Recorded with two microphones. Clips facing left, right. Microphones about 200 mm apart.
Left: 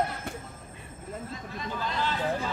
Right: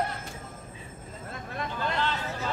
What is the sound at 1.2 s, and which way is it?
Speech, 60° right (ahead or behind).